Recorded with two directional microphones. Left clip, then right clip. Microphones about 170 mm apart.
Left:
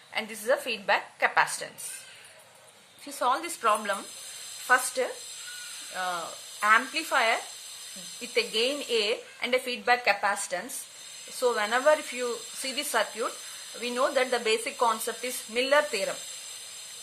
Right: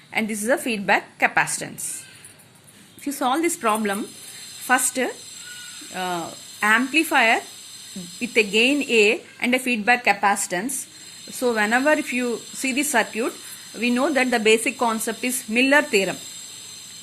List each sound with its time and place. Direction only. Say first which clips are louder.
0.1 s a woman's voice: right 5 dB; 20° right (ahead or behind)
3.1 s a woman's voice: right 6 dB; 25° right (ahead or behind)